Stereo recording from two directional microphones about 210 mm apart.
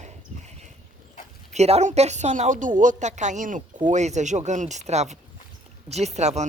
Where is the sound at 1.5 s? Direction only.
30° right (ahead or behind).